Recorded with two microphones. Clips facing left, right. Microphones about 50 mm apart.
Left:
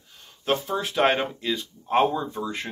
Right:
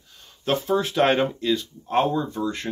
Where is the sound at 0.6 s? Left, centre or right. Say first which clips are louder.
Right 6 dB; centre.